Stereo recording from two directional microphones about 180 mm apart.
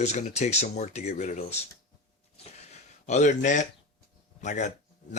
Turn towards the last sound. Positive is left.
turn(degrees=40)  # may be behind; listen again after turning